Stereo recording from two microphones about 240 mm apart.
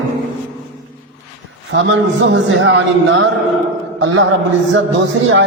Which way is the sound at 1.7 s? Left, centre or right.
Right.